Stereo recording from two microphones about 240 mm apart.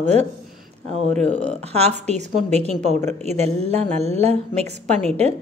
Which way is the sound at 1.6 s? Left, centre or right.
Right.